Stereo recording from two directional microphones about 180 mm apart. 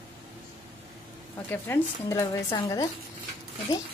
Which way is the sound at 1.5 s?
15° left (ahead or behind).